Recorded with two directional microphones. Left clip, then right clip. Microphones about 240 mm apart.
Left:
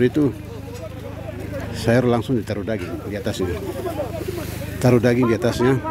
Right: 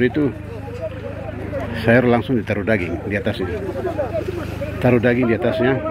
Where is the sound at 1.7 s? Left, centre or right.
Centre.